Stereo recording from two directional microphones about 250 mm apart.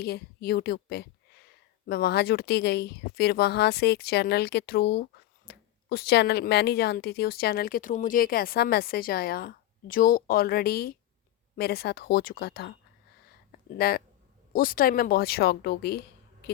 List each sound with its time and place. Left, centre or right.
0.0 s a woman's voice: left
13.5 s a sound: left
14.5 s speech: left